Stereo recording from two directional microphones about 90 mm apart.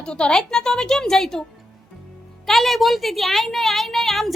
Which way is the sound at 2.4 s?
Centre (ahead or behind).